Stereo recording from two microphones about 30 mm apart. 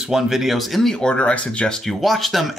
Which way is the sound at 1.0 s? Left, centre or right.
Left.